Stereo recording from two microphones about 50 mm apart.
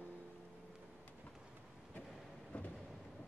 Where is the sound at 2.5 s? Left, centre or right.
Left.